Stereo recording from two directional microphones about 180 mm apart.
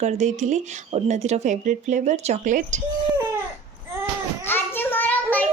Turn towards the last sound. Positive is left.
turn(degrees=10)  # may be behind; listen again after turning